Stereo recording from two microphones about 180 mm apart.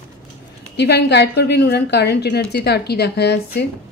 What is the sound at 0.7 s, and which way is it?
A woman's voice, 70° left (ahead or behind).